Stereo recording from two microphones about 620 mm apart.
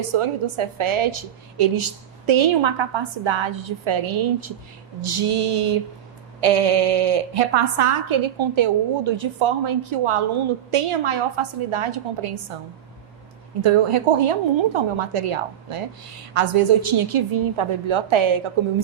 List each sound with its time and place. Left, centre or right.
0.0 s a woman's voice: right
13.6 s a woman's voice: right